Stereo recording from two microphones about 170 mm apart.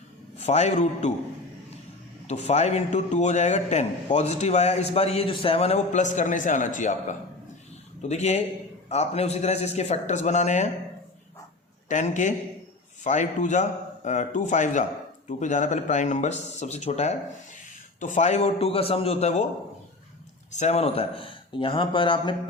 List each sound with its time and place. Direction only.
0.3 s a man's voice: 40° left (ahead or behind)
2.2 s a man's voice: 40° left (ahead or behind)
11.9 s a man's voice: 45° left (ahead or behind)
20.5 s a man's voice: 40° left (ahead or behind)